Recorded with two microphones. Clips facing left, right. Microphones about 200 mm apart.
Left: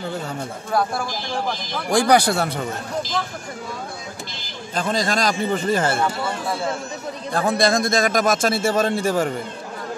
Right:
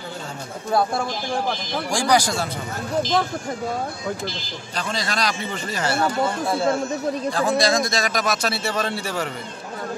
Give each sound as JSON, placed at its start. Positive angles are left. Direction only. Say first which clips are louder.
{"t": 1.9, "sound": "speech", "louder": "left 4 dB", "side_deg": 60}
{"t": 4.7, "sound": "a man's voice", "louder": "left 5 dB", "side_deg": 45}
{"t": 7.3, "sound": "a man's voice", "louder": "left 3 dB", "side_deg": 55}